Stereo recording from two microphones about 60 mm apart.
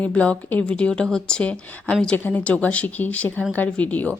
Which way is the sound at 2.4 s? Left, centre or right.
Left.